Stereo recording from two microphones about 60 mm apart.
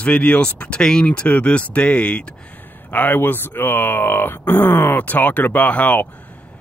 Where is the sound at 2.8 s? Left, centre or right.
Left.